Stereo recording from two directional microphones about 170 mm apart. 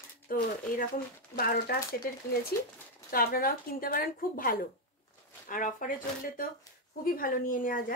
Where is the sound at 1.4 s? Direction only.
60° left (ahead or behind).